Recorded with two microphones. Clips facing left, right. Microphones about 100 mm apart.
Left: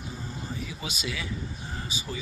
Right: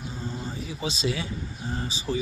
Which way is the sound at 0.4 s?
30° right (ahead or behind).